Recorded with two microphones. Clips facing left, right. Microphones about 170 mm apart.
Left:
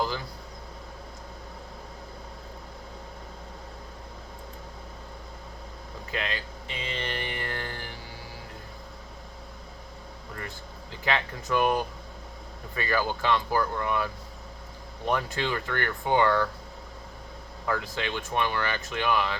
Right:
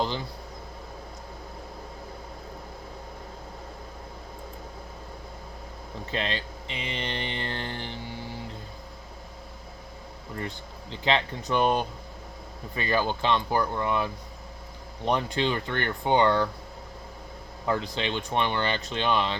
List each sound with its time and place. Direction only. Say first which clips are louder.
6.1 s mantra: right 2 dB; 30° right (ahead or behind)
11.0 s speech: right 3 dB; 25° right (ahead or behind)
17.7 s speech: right 2 dB; 25° right (ahead or behind)